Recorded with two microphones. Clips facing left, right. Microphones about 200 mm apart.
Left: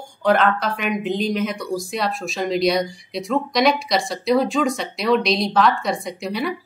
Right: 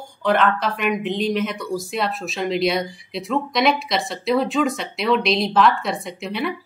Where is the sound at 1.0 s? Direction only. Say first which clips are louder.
Even; centre (ahead or behind).